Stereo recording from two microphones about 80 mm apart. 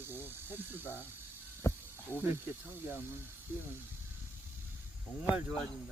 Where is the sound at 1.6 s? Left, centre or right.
Left.